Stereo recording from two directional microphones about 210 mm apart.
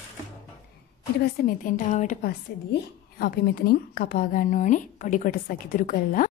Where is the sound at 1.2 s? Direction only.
45° left (ahead or behind).